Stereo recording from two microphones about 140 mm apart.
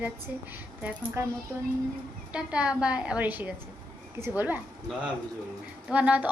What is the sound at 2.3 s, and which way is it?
A woman's voice, 5° right (ahead or behind).